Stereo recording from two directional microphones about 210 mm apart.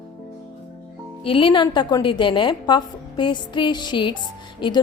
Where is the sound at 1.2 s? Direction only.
25° left (ahead or behind).